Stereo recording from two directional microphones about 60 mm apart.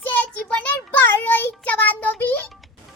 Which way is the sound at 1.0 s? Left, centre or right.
Left.